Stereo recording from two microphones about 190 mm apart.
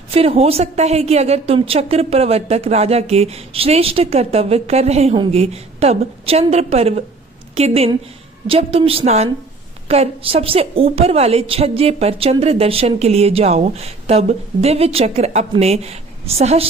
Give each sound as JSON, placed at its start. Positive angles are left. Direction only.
{"t": 0.1, "sound": "a woman's voice", "side_deg": -30}